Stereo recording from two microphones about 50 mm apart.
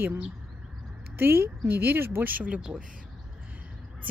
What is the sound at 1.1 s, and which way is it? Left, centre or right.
A woman's voice, right.